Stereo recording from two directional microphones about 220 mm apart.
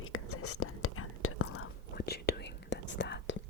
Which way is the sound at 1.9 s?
45° left (ahead or behind).